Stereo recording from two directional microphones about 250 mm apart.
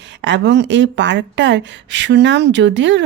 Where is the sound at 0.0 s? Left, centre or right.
Right.